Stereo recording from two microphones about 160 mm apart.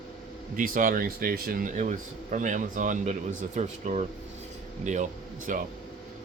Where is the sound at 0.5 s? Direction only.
55° right (ahead or behind).